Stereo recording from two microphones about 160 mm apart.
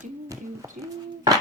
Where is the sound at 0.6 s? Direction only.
20° right (ahead or behind).